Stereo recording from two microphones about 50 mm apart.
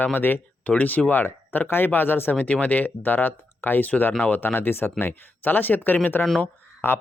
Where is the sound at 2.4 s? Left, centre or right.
Left.